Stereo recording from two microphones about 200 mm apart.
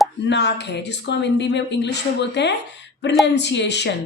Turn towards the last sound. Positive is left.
turn(degrees=60)  # may be behind; listen again after turning